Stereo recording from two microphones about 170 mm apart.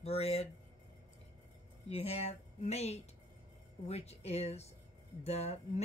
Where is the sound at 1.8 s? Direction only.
35° left (ahead or behind).